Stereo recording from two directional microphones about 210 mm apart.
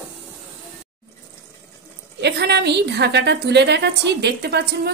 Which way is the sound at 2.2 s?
50° right (ahead or behind).